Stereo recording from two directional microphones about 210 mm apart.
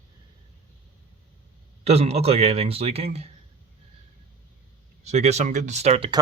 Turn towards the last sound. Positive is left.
turn(degrees=-25)  # may be behind; listen again after turning